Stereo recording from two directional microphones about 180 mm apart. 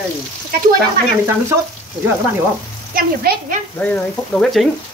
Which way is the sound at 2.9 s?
55° right (ahead or behind).